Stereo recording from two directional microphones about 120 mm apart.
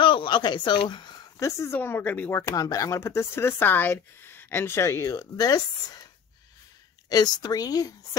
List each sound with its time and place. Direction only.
0.0 s speech: 45° left (ahead or behind)
1.4 s speech: 20° left (ahead or behind)
7.1 s speech: 35° left (ahead or behind)